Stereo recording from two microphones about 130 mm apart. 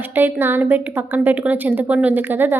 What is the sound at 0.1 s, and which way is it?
A woman's voice, 15° right (ahead or behind).